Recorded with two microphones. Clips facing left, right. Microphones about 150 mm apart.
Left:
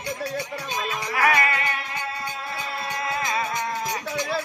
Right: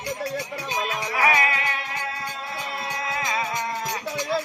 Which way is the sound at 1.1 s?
5° right (ahead or behind).